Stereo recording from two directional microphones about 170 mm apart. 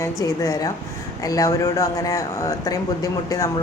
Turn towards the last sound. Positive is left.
turn(degrees=20)  # may be behind; listen again after turning